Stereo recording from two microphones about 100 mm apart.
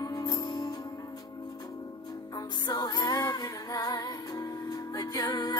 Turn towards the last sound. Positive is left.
turn(degrees=40)  # may be behind; listen again after turning